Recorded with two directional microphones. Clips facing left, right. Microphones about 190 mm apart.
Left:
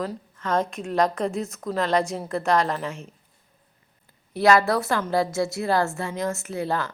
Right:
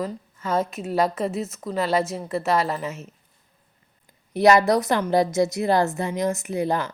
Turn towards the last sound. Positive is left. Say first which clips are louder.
# right 3 dB
turn(degrees=-15)  # may be behind; listen again after turning